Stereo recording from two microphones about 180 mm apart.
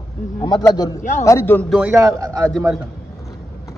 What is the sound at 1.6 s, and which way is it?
A man's voice, 5° right (ahead or behind).